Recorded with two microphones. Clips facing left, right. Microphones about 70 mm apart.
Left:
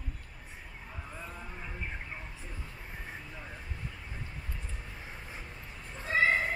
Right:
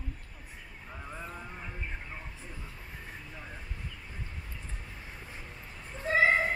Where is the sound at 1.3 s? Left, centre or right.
Centre.